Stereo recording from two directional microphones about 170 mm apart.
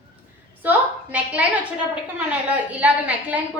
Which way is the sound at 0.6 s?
10° right (ahead or behind).